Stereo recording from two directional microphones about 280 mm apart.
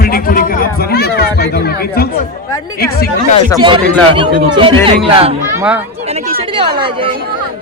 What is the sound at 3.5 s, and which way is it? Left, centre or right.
Speech, centre.